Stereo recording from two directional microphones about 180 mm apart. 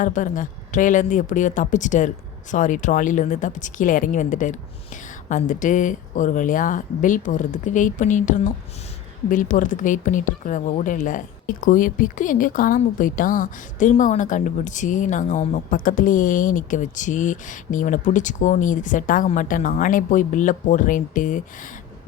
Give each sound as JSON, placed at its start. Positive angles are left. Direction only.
{"t": 0.0, "sound": "speech", "side_deg": 45}